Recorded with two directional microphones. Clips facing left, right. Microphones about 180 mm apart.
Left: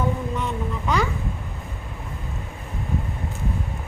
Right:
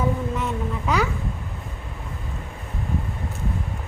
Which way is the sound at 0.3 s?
5° right (ahead or behind).